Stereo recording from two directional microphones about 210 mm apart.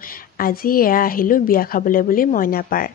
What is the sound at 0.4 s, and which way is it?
A woman's voice, 45° left (ahead or behind).